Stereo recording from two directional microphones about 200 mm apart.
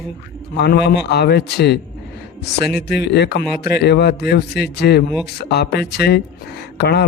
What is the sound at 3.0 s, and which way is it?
A man's voice, 55° left (ahead or behind).